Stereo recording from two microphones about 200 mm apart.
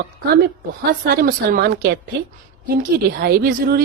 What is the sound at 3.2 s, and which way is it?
Speech, 50° right (ahead or behind).